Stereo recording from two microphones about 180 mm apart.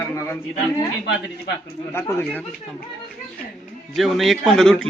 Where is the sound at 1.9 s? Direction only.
15° left (ahead or behind).